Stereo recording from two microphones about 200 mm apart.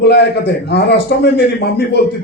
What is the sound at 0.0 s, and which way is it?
A man's voice, 55° left (ahead or behind).